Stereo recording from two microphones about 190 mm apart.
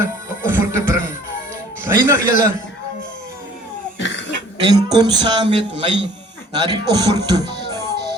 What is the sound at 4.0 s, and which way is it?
Cough, 70° left (ahead or behind).